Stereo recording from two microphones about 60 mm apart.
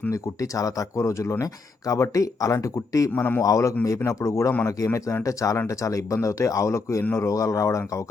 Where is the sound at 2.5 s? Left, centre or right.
Left.